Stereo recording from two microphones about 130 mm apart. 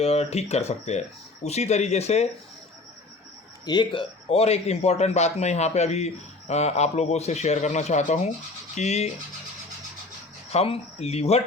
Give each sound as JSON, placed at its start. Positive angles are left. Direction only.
{"t": 0.0, "sound": "a man's voice", "side_deg": 55}
{"t": 3.7, "sound": "a man's voice", "side_deg": 40}
{"t": 10.5, "sound": "speech", "side_deg": 50}